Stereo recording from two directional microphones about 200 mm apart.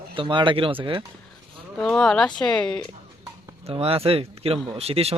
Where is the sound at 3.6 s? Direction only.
30° right (ahead or behind).